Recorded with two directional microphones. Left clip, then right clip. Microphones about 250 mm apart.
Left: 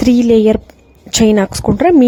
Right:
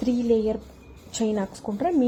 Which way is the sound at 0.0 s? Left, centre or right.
Left.